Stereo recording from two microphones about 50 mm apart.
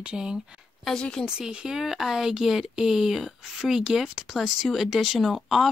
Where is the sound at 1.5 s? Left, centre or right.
Centre.